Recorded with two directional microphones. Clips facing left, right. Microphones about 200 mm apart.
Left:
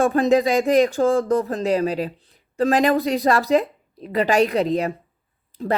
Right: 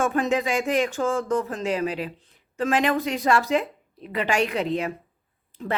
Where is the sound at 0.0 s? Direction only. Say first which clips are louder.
Left 6 dB; 35° left (ahead or behind).